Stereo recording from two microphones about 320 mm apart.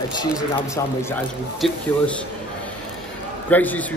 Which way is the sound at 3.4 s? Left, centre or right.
Centre.